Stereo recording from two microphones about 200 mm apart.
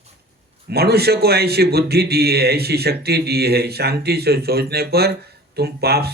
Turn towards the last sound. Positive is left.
turn(degrees=-50)  # may be behind; listen again after turning